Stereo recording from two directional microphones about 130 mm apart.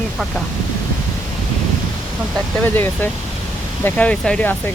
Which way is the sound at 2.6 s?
15° left (ahead or behind).